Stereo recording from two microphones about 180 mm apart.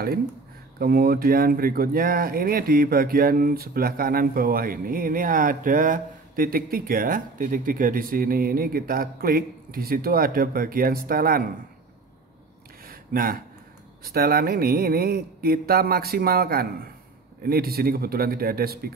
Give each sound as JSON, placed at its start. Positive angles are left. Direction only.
{"t": 0.7, "sound": "speech", "side_deg": -55}
{"t": 12.8, "sound": "a sound", "side_deg": -55}
{"t": 14.1, "sound": "speech", "side_deg": -55}